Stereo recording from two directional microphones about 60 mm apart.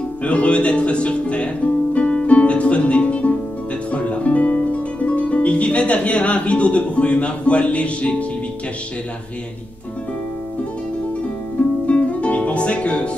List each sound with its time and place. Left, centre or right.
0.2 s music: centre
11.8 s music: left